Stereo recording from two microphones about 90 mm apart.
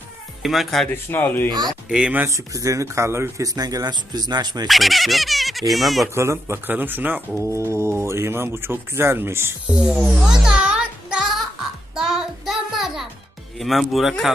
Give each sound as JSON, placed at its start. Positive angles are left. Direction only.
{"t": 0.4, "sound": "speech", "side_deg": 0}
{"t": 0.9, "sound": "speech", "side_deg": 20}
{"t": 1.9, "sound": "speech", "side_deg": -10}
{"t": 2.2, "sound": "speech", "side_deg": -35}
{"t": 4.7, "sound": "speech", "side_deg": 0}
{"t": 6.1, "sound": "speech", "side_deg": -30}
{"t": 9.6, "sound": "speech", "side_deg": -5}
{"t": 10.2, "sound": "music", "side_deg": -10}
{"t": 11.9, "sound": "child singing", "side_deg": -5}
{"t": 13.6, "sound": "speech", "side_deg": 0}